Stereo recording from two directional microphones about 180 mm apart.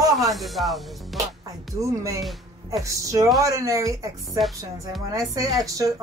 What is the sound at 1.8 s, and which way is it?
Speech, 20° right (ahead or behind).